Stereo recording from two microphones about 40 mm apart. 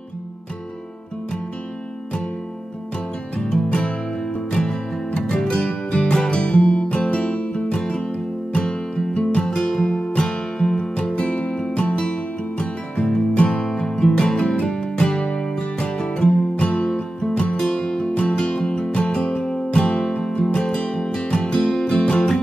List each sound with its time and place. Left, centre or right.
3.4 s music: centre
5.3 s music: left
17.6 s music: centre
21.6 s music: centre
21.9 s music: left